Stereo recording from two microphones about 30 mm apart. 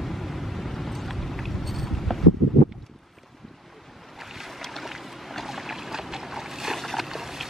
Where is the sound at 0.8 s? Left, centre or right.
Centre.